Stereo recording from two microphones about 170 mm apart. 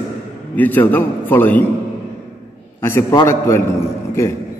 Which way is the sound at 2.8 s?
15° left (ahead or behind).